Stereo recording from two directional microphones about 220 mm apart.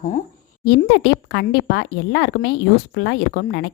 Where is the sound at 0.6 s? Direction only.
50° left (ahead or behind).